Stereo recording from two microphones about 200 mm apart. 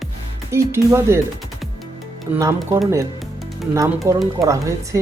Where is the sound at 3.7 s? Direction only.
15° right (ahead or behind).